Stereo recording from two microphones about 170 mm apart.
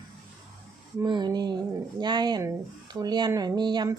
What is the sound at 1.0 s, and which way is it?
Speech, 25° right (ahead or behind).